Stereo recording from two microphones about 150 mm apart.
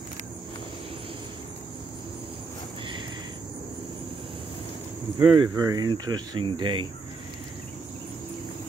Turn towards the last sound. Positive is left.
turn(degrees=-30)  # may be behind; listen again after turning